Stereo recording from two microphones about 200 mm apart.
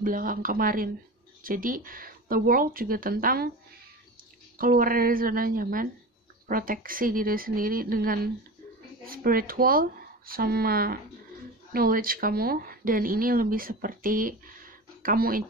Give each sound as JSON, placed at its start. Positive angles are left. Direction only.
{"t": 0.0, "sound": "speech", "side_deg": -45}
{"t": 4.6, "sound": "speech", "side_deg": -45}